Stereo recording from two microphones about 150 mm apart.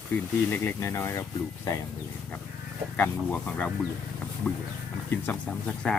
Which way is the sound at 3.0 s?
10° left (ahead or behind).